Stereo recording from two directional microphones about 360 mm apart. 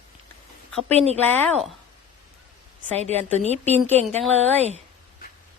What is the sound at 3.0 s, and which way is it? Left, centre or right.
A woman's voice, centre.